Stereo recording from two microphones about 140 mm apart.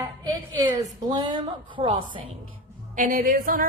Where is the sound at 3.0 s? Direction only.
75° right (ahead or behind).